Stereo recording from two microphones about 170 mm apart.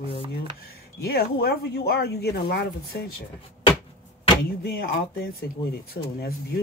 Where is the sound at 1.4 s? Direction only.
70° left (ahead or behind).